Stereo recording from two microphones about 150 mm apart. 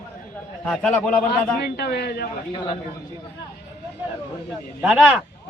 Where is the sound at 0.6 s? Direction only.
5° left (ahead or behind).